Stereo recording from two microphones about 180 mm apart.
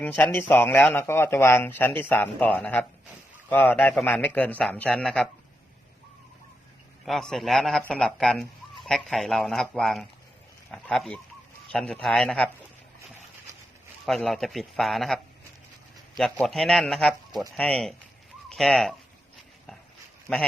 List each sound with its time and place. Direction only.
0.0 s speech: 10° left (ahead or behind)
7.0 s speech: centre (ahead or behind)
13.0 s a sound: 15° right (ahead or behind)
14.0 s speech: centre (ahead or behind)
20.3 s speech: centre (ahead or behind)